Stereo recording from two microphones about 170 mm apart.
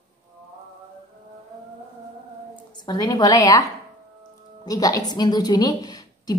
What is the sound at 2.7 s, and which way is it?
A woman's voice, 25° left (ahead or behind).